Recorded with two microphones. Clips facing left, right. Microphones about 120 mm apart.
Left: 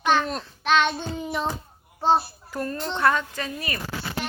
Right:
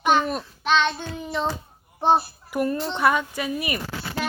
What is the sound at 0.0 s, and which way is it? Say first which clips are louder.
Child singing: right 2 dB; 15° right (ahead or behind).